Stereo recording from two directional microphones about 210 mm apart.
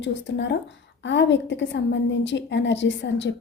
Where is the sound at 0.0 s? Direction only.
60° left (ahead or behind).